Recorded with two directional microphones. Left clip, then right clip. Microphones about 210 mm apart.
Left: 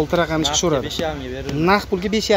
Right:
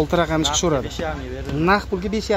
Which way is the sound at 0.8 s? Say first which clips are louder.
Left 3 dB; 40° left (ahead or behind).